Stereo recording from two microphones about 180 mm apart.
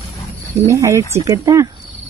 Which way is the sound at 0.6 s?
15° right (ahead or behind).